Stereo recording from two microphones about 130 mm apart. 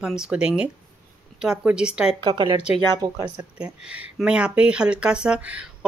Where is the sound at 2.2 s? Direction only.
35° right (ahead or behind).